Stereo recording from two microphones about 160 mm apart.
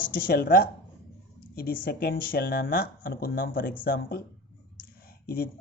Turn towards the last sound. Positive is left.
turn(degrees=70)  # may be behind; listen again after turning